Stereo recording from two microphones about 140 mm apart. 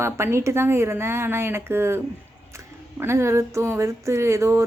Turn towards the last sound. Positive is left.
turn(degrees=-20)  # may be behind; listen again after turning